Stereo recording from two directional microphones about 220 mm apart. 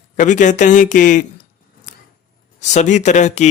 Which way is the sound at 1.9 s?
35° left (ahead or behind).